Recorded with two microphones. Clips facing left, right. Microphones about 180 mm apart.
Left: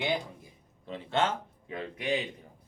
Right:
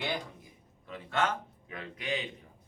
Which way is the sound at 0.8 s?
30° left (ahead or behind).